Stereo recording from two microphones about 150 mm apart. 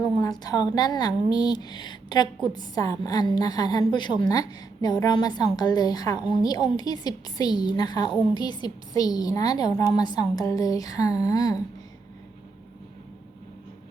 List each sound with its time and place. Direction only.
0.0 s a woman's voice: 25° left (ahead or behind)